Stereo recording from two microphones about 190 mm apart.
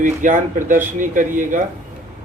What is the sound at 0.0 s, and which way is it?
Speech, 45° right (ahead or behind).